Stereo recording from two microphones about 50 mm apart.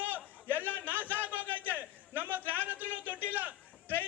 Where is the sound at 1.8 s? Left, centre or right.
Right.